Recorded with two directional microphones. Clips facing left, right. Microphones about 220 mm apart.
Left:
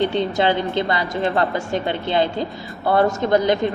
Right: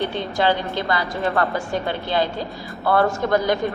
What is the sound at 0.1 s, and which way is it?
A woman's voice, 20° left (ahead or behind).